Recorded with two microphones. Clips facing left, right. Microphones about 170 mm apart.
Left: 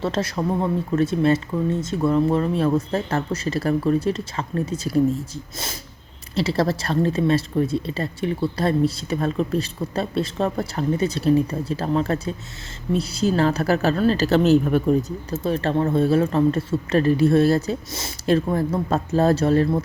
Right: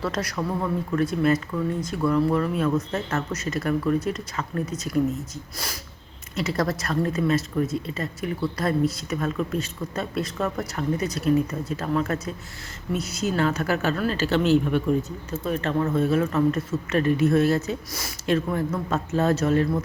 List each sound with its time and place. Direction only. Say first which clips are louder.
0.0 s a woman's voice: left 4 dB; 25° left (ahead or behind)